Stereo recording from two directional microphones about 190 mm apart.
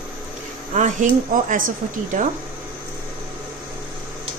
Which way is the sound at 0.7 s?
40° right (ahead or behind).